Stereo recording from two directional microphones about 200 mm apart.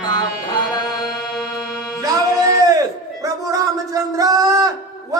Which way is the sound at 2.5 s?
15° right (ahead or behind).